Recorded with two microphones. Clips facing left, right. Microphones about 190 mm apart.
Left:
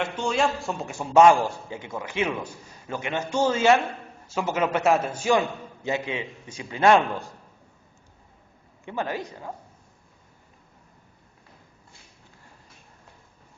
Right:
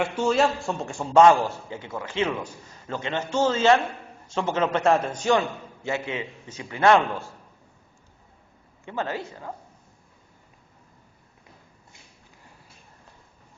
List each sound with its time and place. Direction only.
0.0 s a man's voice: 5° right (ahead or behind); by 7.3 s 15° left (ahead or behind)
8.8 s a man's voice: 15° left (ahead or behind)